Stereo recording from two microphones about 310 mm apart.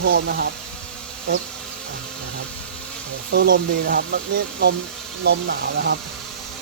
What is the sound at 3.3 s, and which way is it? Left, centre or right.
Speech, right.